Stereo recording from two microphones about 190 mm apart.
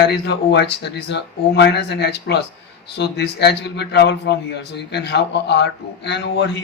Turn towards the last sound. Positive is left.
turn(degrees=65)  # may be behind; listen again after turning